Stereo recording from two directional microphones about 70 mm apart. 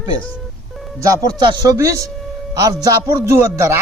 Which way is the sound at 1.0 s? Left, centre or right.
Right.